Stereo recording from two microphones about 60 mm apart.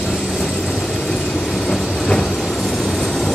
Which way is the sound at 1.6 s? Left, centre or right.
Centre.